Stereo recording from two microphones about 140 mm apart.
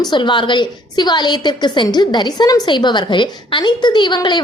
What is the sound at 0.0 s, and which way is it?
A woman's voice, 35° left (ahead or behind).